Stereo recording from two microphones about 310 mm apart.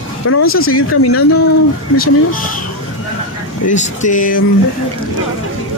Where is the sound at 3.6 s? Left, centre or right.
Left.